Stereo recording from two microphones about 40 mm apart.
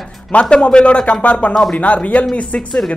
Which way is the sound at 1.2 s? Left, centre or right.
Left.